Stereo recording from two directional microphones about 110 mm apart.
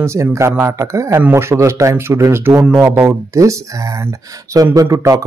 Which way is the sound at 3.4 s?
30° right (ahead or behind).